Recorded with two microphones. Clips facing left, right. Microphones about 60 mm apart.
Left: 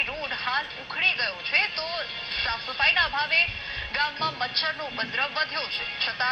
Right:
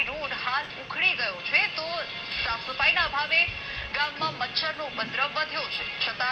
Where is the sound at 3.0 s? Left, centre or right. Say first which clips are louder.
Left 1 dB; left.